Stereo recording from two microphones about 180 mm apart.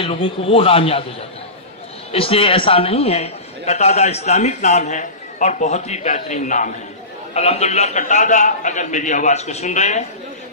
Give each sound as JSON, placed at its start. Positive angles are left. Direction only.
{"t": 0.0, "sound": "a man's voice", "side_deg": 30}
{"t": 2.1, "sound": "a man's voice", "side_deg": 30}